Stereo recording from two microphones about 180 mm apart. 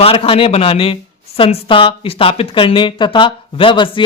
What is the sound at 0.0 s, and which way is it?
A man's voice, 30° left (ahead or behind).